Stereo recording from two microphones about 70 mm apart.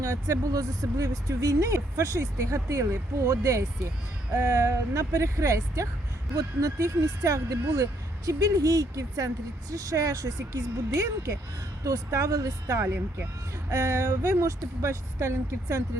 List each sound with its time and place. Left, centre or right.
0.0 s speech: right
12.8 s speech: right
13.7 s speech: right